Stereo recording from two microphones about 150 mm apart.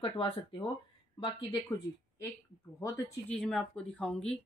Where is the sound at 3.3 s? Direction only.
5° left (ahead or behind).